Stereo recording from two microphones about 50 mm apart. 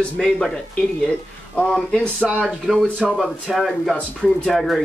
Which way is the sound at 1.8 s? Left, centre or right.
Centre.